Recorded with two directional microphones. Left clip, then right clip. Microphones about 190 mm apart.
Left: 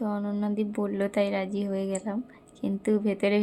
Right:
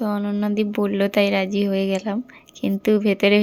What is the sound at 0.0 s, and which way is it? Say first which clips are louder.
A woman's voice: right 7 dB; 20° right (ahead or behind).